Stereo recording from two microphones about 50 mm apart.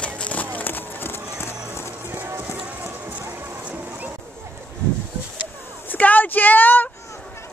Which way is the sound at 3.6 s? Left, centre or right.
Right.